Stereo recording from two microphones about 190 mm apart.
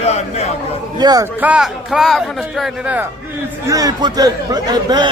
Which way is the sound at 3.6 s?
20° right (ahead or behind).